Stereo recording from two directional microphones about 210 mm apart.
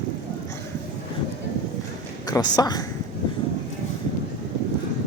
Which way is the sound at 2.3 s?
20° left (ahead or behind).